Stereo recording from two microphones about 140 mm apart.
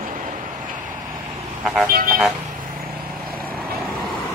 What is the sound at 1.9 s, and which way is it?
Vehicle, 90° right.